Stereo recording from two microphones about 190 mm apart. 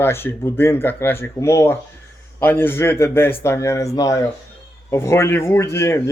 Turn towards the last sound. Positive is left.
turn(degrees=15)  # may be behind; listen again after turning